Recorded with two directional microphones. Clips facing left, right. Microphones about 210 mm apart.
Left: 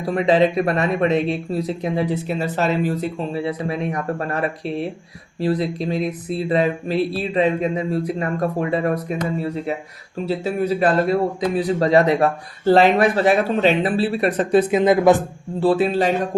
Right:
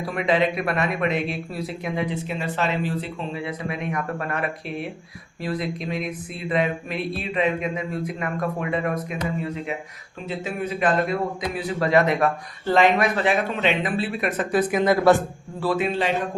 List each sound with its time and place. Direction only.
0.0 s a man's voice: 35° left (ahead or behind)
10.2 s a man's voice: 35° left (ahead or behind); by 15.2 s 20° left (ahead or behind)
15.6 s a man's voice: 35° left (ahead or behind)